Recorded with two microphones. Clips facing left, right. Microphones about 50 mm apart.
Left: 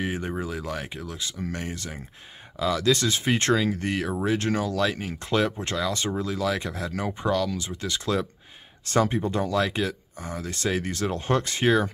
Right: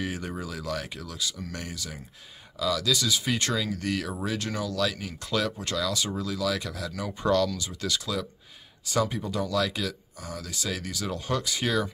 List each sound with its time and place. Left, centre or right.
0.0 s speech: left
7.2 s speech: centre
7.5 s speech: left
8.9 s speech: left